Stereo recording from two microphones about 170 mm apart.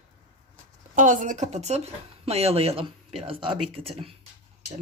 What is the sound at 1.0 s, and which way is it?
Speech, 50° right (ahead or behind).